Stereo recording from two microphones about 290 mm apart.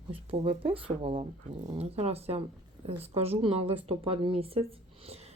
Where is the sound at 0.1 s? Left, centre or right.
Centre.